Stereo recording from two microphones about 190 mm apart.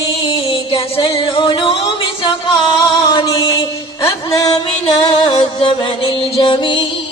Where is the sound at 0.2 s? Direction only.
25° left (ahead or behind).